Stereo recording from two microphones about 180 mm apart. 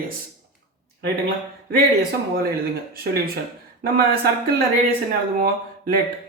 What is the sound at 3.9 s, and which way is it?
A man's voice, 60° right (ahead or behind).